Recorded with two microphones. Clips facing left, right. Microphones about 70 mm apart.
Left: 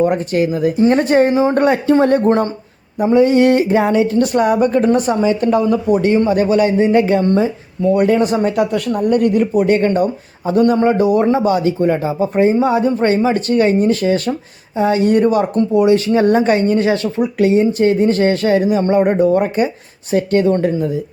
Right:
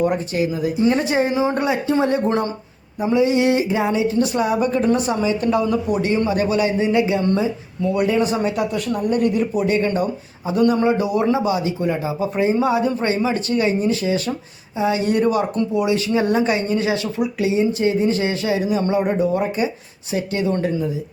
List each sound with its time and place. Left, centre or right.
0.0 s speech: left